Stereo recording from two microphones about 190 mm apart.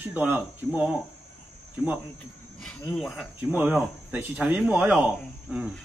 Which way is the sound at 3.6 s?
5° right (ahead or behind).